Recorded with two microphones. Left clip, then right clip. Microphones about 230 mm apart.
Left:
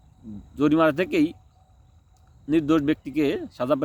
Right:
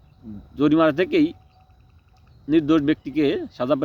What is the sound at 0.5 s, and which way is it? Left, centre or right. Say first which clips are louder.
Speech: right 2 dB; centre.